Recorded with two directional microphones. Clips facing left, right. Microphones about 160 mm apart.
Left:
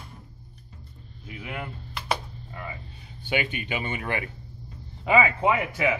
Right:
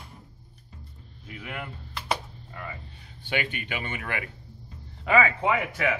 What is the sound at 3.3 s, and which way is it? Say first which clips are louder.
Speech: left 3 dB; 15° left (ahead or behind).